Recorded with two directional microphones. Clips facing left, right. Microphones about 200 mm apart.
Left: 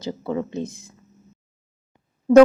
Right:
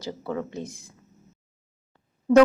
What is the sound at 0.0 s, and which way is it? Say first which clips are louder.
Speech: left 4 dB; 20° left (ahead or behind).